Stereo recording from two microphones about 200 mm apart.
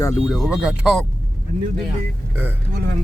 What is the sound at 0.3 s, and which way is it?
Speech, centre (ahead or behind).